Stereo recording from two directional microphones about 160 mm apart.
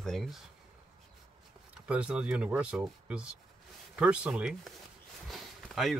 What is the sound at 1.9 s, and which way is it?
Speech, 5° right (ahead or behind).